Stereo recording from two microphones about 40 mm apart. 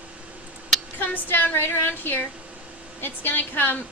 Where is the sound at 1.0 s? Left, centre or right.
Left.